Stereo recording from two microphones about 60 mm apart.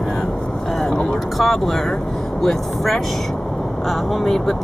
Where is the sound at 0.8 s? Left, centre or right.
Centre.